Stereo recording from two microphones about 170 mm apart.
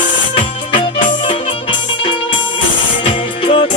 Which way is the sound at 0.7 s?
30° left (ahead or behind).